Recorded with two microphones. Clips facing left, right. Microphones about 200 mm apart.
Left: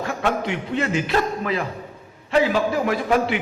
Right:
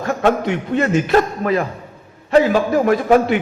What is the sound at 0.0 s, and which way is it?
A man's voice, 45° right (ahead or behind).